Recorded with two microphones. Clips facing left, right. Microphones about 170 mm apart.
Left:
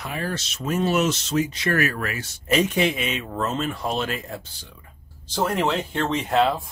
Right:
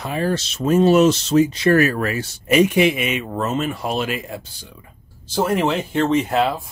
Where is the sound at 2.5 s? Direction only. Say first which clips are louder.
Right 6 dB; 10° right (ahead or behind).